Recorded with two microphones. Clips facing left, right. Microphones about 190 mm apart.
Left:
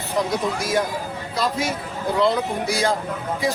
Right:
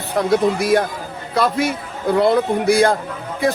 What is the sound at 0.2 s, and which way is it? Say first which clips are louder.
A man's voice: right 7 dB; 60° right (ahead or behind).